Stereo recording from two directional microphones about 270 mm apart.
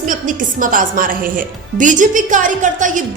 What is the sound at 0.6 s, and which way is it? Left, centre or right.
A woman's voice, right.